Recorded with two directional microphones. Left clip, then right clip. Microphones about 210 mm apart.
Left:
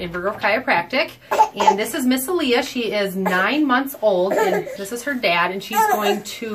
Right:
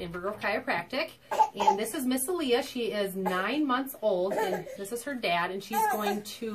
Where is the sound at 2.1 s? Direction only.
20° right (ahead or behind).